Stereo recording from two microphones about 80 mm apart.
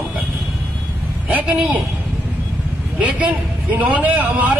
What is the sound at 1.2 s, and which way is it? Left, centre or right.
Speech, centre.